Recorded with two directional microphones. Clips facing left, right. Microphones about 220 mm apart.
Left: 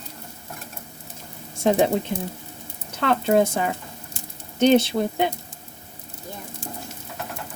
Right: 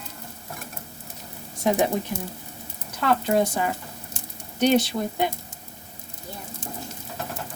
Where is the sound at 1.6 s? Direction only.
25° left (ahead or behind).